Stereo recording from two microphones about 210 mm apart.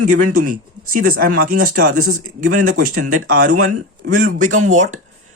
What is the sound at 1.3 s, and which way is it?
Speech, 90° right.